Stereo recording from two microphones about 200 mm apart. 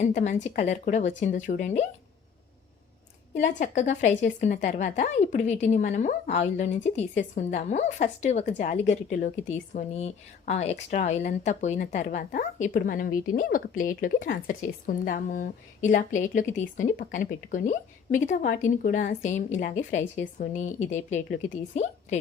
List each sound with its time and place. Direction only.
0.0 s a woman's voice: 35° left (ahead or behind)
3.3 s a woman's voice: 40° left (ahead or behind)